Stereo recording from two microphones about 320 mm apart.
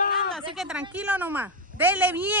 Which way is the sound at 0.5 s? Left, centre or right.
Centre.